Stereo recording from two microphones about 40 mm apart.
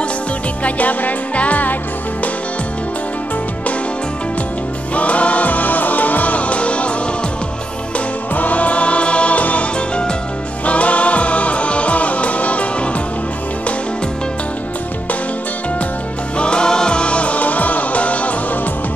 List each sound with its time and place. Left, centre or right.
0.7 s music: left
4.9 s music: left
8.4 s music: left
16.3 s music: left